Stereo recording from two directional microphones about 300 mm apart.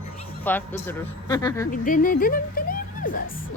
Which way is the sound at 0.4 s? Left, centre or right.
Centre.